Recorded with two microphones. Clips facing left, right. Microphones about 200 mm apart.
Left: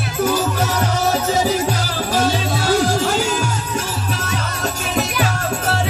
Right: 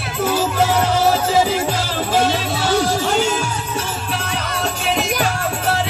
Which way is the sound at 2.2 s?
45° left (ahead or behind).